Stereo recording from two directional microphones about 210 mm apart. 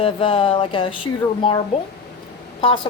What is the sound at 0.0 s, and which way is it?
A woman's voice, 25° left (ahead or behind).